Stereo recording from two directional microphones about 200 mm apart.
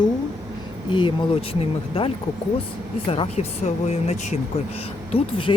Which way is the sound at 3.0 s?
30° left (ahead or behind).